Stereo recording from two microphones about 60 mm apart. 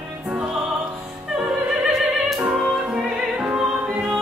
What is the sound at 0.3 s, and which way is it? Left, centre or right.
Music, centre.